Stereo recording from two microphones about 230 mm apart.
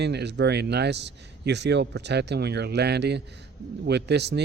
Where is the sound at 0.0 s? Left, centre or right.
Right.